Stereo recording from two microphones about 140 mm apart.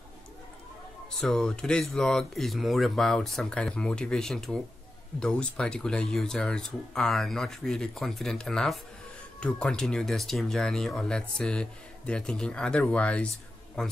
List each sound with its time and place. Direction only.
1.2 s speech: 5° left (ahead or behind)